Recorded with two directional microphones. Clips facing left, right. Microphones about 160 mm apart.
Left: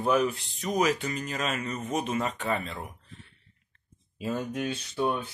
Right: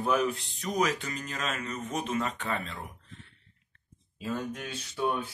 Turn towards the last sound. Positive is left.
turn(degrees=0)  # may be behind; listen again after turning